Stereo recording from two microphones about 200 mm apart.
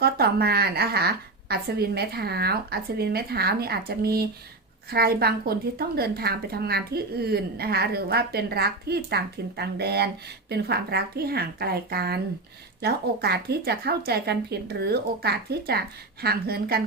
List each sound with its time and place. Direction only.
0.0 s speech: 50° right (ahead or behind)